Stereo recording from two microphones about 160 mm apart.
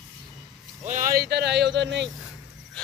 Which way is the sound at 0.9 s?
55° right (ahead or behind).